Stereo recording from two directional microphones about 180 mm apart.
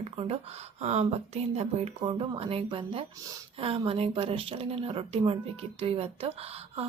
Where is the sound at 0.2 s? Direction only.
35° right (ahead or behind).